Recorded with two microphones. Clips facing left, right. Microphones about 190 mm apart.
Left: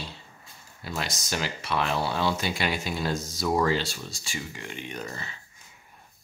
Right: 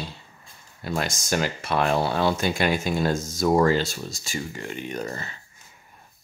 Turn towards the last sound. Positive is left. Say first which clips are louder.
# right 5 dB
turn(degrees=-45)  # may be behind; listen again after turning